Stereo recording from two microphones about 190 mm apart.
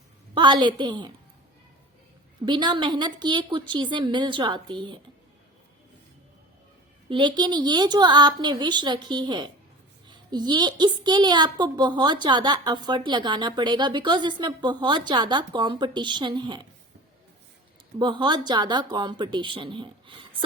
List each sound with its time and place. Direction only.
0.3 s a woman's voice: 25° right (ahead or behind)
2.4 s a woman's voice: 25° right (ahead or behind)
7.1 s a woman's voice: 25° right (ahead or behind)
18.0 s a woman's voice: 25° right (ahead or behind)